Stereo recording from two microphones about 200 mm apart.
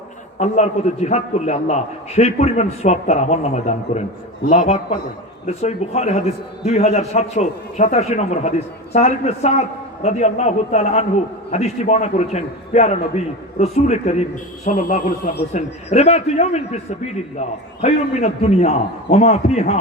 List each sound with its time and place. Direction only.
0.3 s a man's voice: 35° left (ahead or behind)
17.8 s a man's voice: 35° left (ahead or behind)